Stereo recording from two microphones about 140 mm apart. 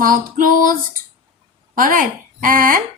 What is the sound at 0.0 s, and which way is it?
Speech, 80° right.